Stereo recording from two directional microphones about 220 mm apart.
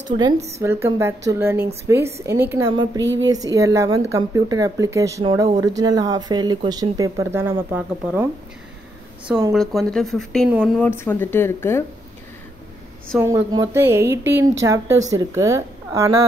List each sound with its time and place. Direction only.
0.2 s speech: 30° right (ahead or behind)
0.6 s speech: 10° right (ahead or behind)
3.0 s speech: 55° right (ahead or behind)
3.3 s speech: 15° right (ahead or behind)
9.5 s speech: centre (ahead or behind)
13.1 s speech: centre (ahead or behind)
13.5 s speech: 15° right (ahead or behind)